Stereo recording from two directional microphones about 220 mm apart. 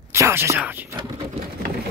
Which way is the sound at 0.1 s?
10° right (ahead or behind).